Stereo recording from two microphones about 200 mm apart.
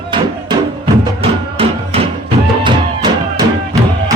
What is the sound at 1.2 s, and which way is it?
Music, 30° right (ahead or behind).